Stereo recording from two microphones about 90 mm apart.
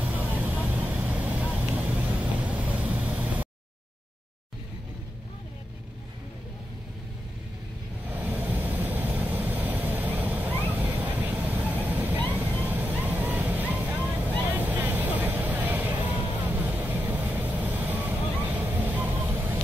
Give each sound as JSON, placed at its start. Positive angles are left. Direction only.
{"t": 0.0, "sound": "vehicle", "side_deg": -20}
{"t": 8.4, "sound": "vehicle", "side_deg": -15}
{"t": 10.7, "sound": "waves", "side_deg": -15}
{"t": 11.5, "sound": "vehicle", "side_deg": -15}
{"t": 12.3, "sound": "a sound", "side_deg": -15}
{"t": 12.6, "sound": "boat", "side_deg": -20}
{"t": 14.5, "sound": "vehicle", "side_deg": -20}